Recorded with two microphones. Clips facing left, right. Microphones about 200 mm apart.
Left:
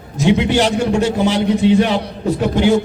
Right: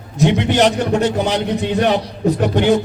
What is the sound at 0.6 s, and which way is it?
Speech, 20° right (ahead or behind).